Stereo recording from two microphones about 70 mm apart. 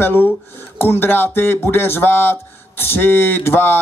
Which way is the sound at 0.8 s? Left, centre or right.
Left.